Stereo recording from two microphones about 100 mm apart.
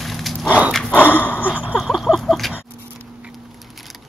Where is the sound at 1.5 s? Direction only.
10° right (ahead or behind).